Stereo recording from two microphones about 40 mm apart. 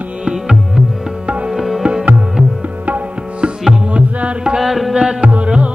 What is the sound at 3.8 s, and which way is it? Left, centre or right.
Music, right.